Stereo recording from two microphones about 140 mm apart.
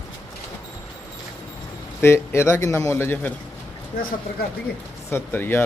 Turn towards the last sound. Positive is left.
turn(degrees=15)  # may be behind; listen again after turning